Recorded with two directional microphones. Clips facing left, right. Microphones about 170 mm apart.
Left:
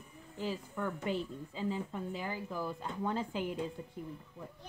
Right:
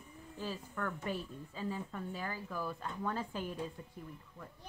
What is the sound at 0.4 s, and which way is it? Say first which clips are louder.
A woman's voice: left 3 dB; 15° left (ahead or behind).